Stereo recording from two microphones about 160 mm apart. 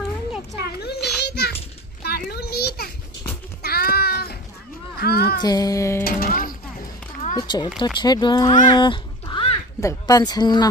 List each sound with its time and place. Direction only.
0.6 s children playing: 90° left
3.6 s child singing: 70° left (ahead or behind)
4.9 s children playing: 75° left (ahead or behind)
5.4 s a woman's voice: 25° left (ahead or behind)
6.0 s speech: 65° left (ahead or behind)
7.3 s a woman's voice: 25° left (ahead or behind)
8.5 s speech: 45° left (ahead or behind)
8.7 s cat: 30° left (ahead or behind)
9.8 s a woman's voice: 20° left (ahead or behind)